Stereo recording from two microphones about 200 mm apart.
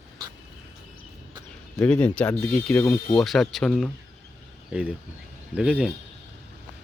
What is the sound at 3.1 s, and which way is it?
Speech, centre (ahead or behind).